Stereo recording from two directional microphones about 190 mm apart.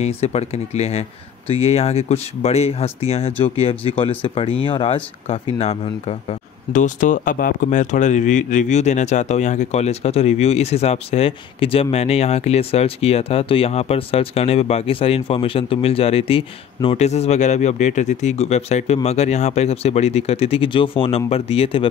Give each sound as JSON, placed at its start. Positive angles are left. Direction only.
{"t": 0.0, "sound": "speech", "side_deg": 35}